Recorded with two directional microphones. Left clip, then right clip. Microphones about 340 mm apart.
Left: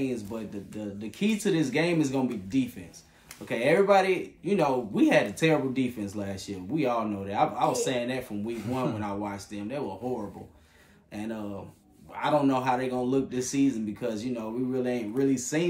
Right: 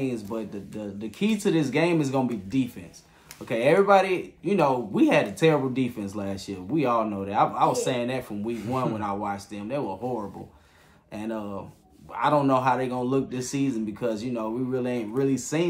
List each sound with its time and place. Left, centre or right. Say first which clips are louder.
0.0 s speech: right 2 dB; centre
11.1 s speech: right 4 dB; centre